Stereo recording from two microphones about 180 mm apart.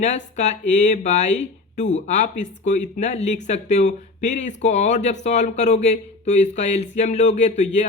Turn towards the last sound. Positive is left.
turn(degrees=40)  # may be behind; listen again after turning